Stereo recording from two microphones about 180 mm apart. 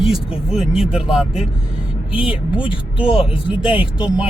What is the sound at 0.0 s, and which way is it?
Speech, 5° right (ahead or behind).